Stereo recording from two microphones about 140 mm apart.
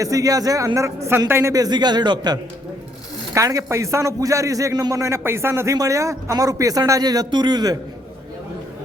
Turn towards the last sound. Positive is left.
turn(degrees=-30)  # may be behind; listen again after turning